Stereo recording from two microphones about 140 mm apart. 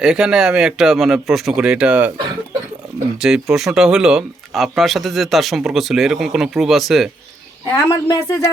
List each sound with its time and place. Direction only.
0.0 s speech: 5° right (ahead or behind)
3.2 s speech: 5° right (ahead or behind)
7.7 s a woman's voice: 25° left (ahead or behind)